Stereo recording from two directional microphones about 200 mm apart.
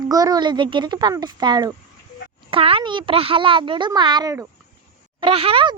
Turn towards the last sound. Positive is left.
turn(degrees=-25)  # may be behind; listen again after turning